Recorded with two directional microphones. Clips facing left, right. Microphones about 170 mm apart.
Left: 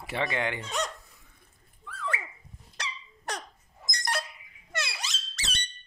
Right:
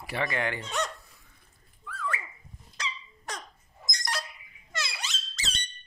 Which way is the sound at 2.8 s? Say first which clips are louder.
Right 1 dB; 65° left (ahead or behind).